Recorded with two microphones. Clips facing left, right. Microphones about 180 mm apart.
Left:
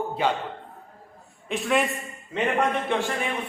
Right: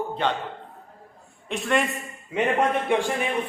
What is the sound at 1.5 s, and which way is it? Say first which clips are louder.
Speech: even; centre (ahead or behind).